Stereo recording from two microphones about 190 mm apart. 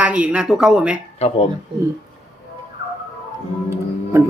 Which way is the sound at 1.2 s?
35° left (ahead or behind).